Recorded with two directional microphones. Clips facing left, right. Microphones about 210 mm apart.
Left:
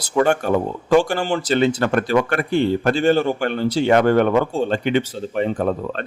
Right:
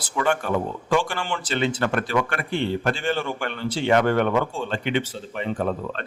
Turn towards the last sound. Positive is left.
turn(degrees=45)  # may be behind; listen again after turning